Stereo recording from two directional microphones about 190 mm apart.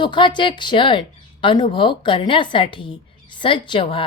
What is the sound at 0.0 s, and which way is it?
A woman's voice, 25° left (ahead or behind).